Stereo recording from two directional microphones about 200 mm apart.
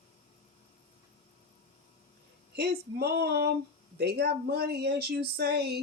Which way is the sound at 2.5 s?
55° right (ahead or behind).